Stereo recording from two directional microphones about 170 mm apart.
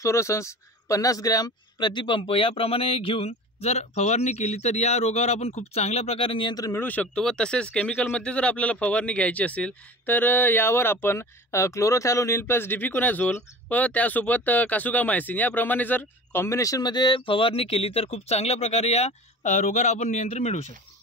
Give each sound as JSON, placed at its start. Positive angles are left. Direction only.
{"t": 0.0, "sound": "speech", "side_deg": 15}